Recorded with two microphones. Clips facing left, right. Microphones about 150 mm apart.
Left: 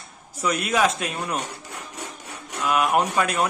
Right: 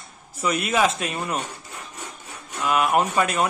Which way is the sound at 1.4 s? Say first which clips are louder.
Left 1 dB; 80° left.